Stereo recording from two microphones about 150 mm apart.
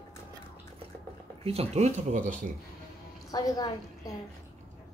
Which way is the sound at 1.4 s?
45° right (ahead or behind).